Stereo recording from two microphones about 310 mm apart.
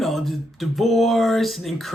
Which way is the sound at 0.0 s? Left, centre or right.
Centre.